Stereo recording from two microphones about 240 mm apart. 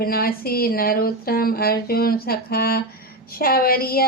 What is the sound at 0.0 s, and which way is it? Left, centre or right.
Speech, left.